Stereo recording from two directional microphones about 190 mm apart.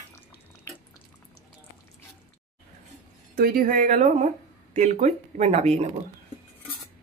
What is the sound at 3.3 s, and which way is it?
Speech, 50° right (ahead or behind).